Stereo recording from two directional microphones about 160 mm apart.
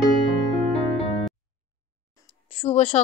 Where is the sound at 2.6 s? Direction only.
45° left (ahead or behind).